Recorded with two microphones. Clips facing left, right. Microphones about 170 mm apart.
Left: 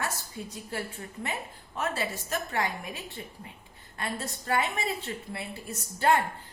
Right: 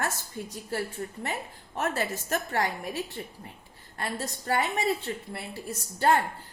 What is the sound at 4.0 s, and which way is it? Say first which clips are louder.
Speech: right 1 dB; 35° right (ahead or behind).